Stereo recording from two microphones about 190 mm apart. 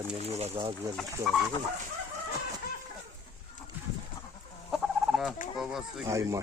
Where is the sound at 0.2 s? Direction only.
35° right (ahead or behind).